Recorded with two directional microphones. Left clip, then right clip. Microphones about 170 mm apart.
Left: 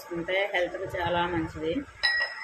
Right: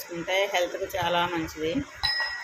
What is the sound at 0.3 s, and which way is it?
Speech, 15° right (ahead or behind).